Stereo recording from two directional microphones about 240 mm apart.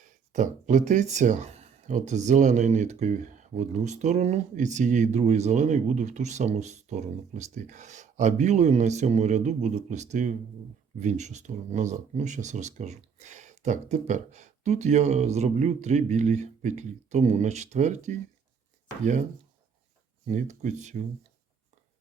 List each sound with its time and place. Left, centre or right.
0.3 s speech: right
20.2 s speech: right